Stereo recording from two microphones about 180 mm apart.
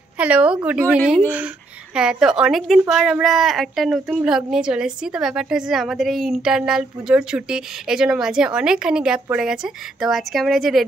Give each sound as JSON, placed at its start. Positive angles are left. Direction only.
{"t": 0.2, "sound": "a woman's voice", "side_deg": -5}